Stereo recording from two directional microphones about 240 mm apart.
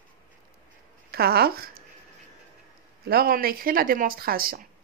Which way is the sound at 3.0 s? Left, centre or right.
Right.